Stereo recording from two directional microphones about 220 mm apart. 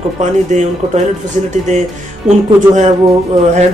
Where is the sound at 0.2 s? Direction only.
35° right (ahead or behind).